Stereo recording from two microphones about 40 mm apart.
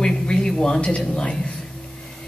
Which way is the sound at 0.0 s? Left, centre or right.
Centre.